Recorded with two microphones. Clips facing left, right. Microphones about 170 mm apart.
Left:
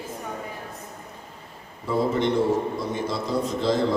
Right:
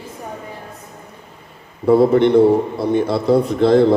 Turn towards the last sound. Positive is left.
turn(degrees=-60)  # may be behind; listen again after turning